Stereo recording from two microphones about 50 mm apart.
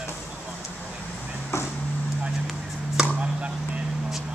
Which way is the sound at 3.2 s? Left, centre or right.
Right.